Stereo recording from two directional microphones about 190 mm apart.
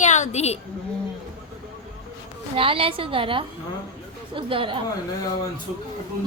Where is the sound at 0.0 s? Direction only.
40° left (ahead or behind).